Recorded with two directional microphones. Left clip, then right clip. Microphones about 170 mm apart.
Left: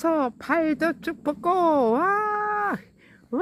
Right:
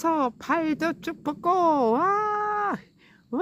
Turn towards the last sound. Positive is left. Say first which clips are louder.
# left 3 dB
turn(degrees=10)  # may be behind; listen again after turning